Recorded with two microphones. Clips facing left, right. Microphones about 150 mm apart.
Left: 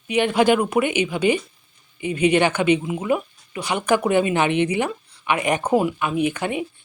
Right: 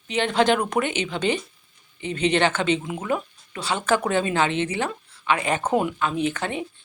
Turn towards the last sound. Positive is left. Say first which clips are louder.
# left 3 dB
turn(degrees=15)  # may be behind; listen again after turning